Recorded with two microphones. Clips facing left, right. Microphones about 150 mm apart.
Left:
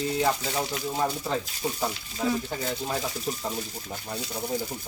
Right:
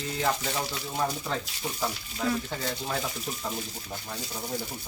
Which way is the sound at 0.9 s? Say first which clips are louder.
Left 1 dB; 15° left (ahead or behind).